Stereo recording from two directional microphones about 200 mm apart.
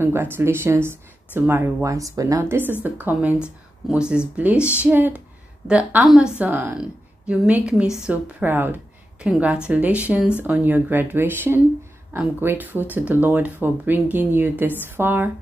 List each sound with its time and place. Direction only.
0.0 s a woman's voice: 10° right (ahead or behind)
4.6 s speech: 10° left (ahead or behind)
4.8 s a woman's voice: 10° right (ahead or behind)